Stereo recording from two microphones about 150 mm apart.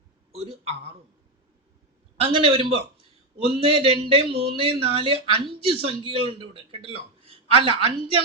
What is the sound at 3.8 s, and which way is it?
A woman's voice, 35° right (ahead or behind).